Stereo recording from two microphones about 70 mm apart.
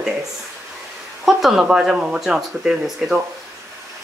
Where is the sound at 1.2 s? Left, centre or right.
Centre.